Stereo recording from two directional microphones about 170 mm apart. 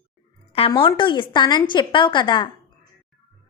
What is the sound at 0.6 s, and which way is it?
A woman's voice, 30° left (ahead or behind).